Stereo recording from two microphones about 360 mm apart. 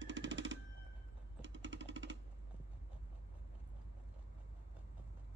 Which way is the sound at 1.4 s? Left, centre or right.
Right.